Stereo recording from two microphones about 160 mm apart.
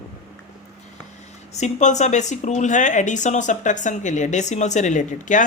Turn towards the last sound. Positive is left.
turn(degrees=50)  # may be behind; listen again after turning